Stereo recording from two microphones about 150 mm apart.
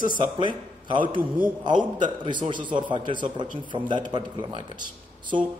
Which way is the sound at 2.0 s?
30° right (ahead or behind).